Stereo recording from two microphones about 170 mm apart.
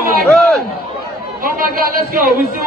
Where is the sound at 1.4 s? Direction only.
55° right (ahead or behind).